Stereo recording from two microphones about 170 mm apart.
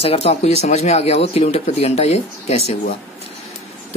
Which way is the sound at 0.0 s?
35° left (ahead or behind).